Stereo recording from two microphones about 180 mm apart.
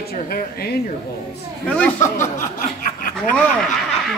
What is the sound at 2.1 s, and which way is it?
Chuckle, 45° left (ahead or behind).